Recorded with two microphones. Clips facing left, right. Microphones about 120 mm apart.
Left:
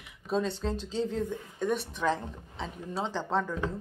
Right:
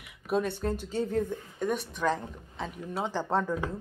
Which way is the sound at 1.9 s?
Centre (ahead or behind).